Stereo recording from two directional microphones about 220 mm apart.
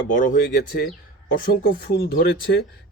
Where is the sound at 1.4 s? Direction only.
40° left (ahead or behind).